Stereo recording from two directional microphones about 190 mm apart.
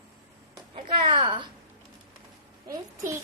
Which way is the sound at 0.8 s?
35° right (ahead or behind).